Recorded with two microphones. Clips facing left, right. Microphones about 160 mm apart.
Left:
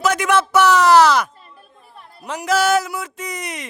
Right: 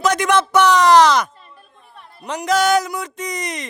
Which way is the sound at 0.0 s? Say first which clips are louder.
Right 1 dB; 5° left (ahead or behind).